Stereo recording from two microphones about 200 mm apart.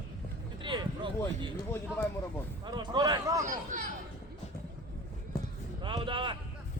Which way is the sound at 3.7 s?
40° right (ahead or behind).